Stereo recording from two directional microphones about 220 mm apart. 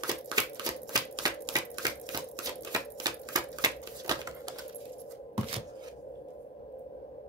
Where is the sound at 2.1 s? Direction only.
15° right (ahead or behind).